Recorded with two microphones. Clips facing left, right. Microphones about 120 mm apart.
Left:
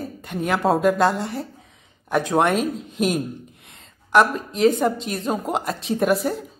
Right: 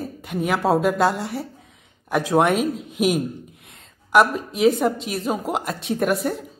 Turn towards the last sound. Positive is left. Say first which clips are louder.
# left 1 dB
turn(degrees=0)  # may be behind; listen again after turning